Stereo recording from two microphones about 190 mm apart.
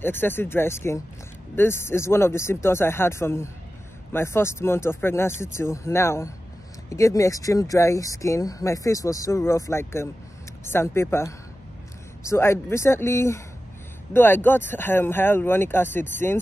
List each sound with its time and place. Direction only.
0.0 s speech: 10° left (ahead or behind)